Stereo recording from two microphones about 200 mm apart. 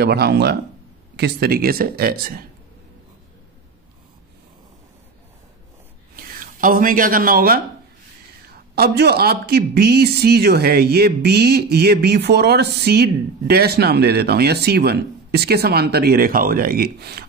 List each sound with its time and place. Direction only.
0.0 s speech: 55° right (ahead or behind)
6.1 s speech: 45° right (ahead or behind)
8.7 s speech: 55° right (ahead or behind)